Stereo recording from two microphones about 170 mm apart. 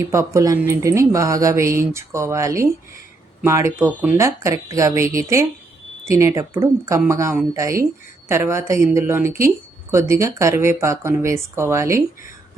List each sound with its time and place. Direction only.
0.1 s a woman's voice: 15° right (ahead or behind)